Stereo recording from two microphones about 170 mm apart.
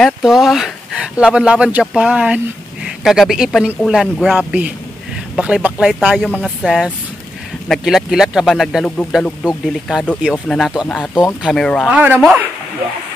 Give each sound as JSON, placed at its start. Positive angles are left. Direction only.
{"t": 0.0, "sound": "speech", "side_deg": 0}
{"t": 11.9, "sound": "speech", "side_deg": -10}